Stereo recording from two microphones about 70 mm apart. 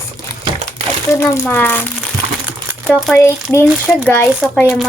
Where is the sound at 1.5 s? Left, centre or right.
Left.